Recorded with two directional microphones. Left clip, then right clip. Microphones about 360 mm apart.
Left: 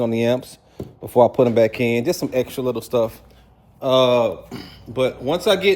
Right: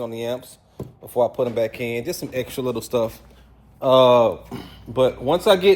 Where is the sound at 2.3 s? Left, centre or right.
Centre.